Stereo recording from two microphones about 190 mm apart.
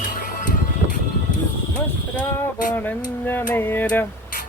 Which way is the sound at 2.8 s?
10° left (ahead or behind).